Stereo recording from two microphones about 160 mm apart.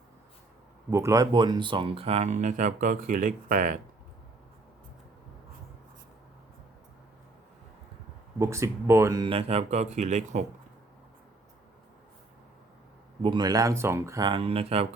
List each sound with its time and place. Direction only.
0.9 s speech: 15° right (ahead or behind); by 3.8 s 55° right (ahead or behind)
8.4 s speech: 15° right (ahead or behind)
9.2 s speech: 35° right (ahead or behind)
13.2 s speech: 25° right (ahead or behind)
14.3 s speech: 35° right (ahead or behind)